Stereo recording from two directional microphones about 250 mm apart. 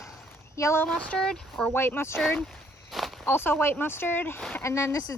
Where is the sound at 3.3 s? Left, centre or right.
Centre.